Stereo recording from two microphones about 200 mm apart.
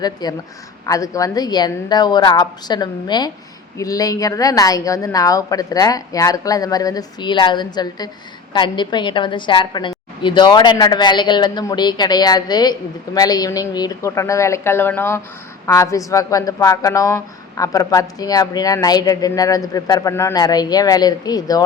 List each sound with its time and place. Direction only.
0.0 s a woman's voice: 20° left (ahead or behind)